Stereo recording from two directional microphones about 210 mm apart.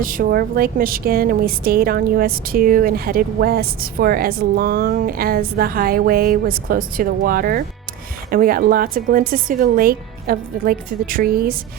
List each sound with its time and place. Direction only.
0.0 s a woman's voice: 40° right (ahead or behind)